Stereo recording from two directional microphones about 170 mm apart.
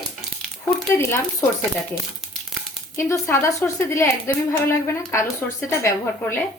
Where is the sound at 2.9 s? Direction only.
15° left (ahead or behind).